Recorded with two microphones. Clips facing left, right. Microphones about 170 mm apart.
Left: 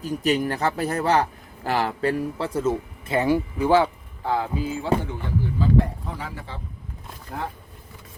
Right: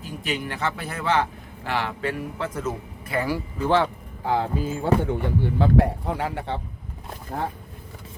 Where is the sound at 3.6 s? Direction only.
5° left (ahead or behind).